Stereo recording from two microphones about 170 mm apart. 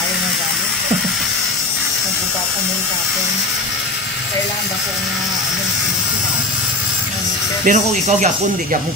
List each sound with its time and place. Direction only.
7.6 s speech: 45° right (ahead or behind)